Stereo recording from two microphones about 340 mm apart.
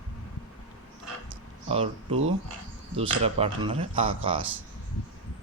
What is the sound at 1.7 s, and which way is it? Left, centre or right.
Speech, centre.